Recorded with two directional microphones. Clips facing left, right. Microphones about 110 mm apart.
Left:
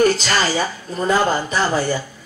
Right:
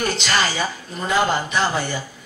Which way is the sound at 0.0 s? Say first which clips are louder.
Left 5 dB; 40° left (ahead or behind).